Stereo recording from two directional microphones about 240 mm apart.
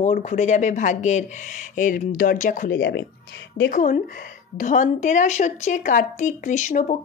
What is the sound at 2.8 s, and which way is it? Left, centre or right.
Speech, left.